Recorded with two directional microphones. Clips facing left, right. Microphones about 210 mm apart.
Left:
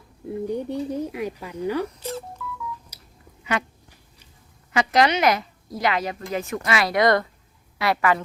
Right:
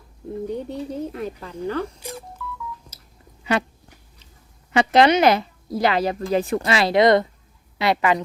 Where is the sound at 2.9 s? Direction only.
15° left (ahead or behind).